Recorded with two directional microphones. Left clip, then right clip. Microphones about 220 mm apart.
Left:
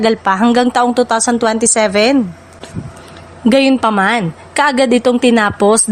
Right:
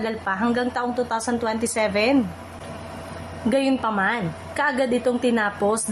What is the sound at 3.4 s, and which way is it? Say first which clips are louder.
A woman's voice: left 10 dB; 45° left (ahead or behind).